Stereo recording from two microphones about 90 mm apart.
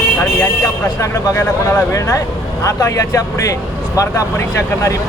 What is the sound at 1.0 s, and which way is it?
Speech, 35° left (ahead or behind).